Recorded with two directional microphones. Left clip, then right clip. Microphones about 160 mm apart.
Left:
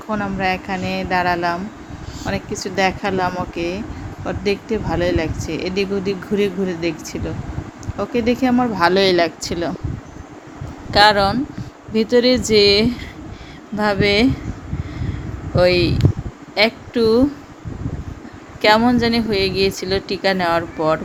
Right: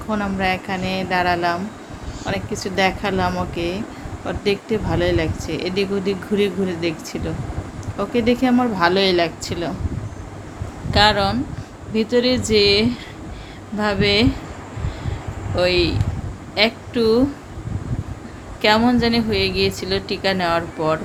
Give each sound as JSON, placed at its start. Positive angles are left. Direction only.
{"t": 0.1, "sound": "speech", "side_deg": 20}
{"t": 8.8, "sound": "speech", "side_deg": 40}
{"t": 10.9, "sound": "a woman's voice", "side_deg": 40}
{"t": 15.5, "sound": "a woman's voice", "side_deg": 40}
{"t": 18.6, "sound": "a woman's voice", "side_deg": 35}